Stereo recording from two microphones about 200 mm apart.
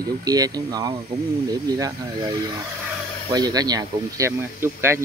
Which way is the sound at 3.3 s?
20° right (ahead or behind).